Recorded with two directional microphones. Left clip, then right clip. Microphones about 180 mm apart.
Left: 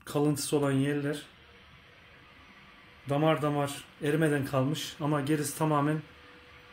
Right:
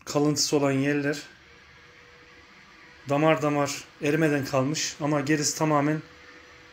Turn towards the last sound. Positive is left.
turn(degrees=5)  # may be behind; listen again after turning